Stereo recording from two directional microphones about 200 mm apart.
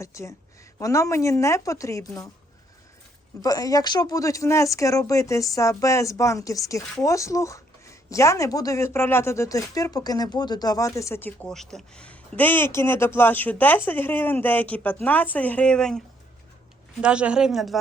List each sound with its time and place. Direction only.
0.0 s speech: 15° left (ahead or behind)
3.4 s speech: 20° left (ahead or behind); by 17.7 s centre (ahead or behind)